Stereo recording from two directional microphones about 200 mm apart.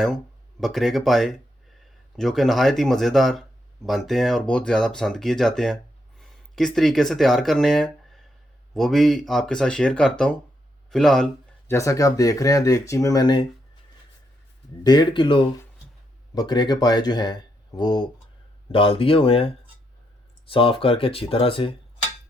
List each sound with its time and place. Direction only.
0.6 s speech: centre (ahead or behind)
11.7 s speech: 15° left (ahead or behind)
14.8 s speech: 20° left (ahead or behind)